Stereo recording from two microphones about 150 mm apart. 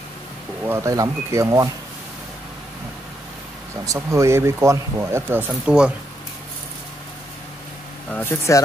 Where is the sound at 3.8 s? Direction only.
20° right (ahead or behind).